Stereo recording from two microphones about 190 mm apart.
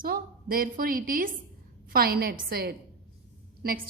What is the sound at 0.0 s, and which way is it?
A woman's voice, 50° right (ahead or behind).